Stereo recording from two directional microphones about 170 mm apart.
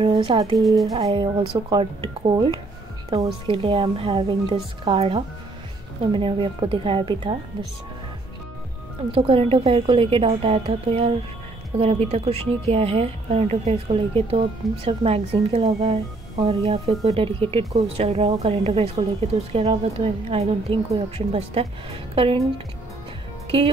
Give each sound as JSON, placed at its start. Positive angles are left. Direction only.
{"t": 0.0, "sound": "speech", "side_deg": -30}
{"t": 3.5, "sound": "a woman's voice", "side_deg": -30}
{"t": 9.1, "sound": "a woman's voice", "side_deg": -35}